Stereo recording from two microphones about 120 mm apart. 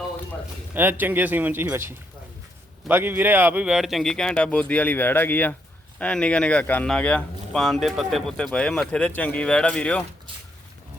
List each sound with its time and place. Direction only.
0.7 s speech: 15° right (ahead or behind); by 10.0 s 10° left (ahead or behind)